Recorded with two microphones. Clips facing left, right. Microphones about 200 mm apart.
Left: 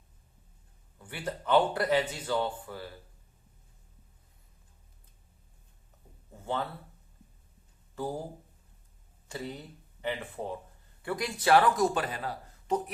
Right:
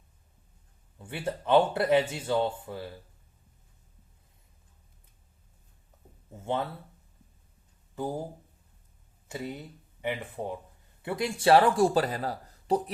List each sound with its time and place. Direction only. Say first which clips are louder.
0.9 s speech: right 3 dB; 25° right (ahead or behind)
6.3 s speech: right 3 dB; 20° right (ahead or behind)
9.3 s speech: right 2 dB; 15° right (ahead or behind); by 12.8 s 35° right (ahead or behind)